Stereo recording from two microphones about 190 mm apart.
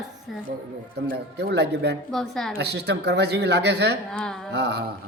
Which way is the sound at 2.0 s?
Centre (ahead or behind).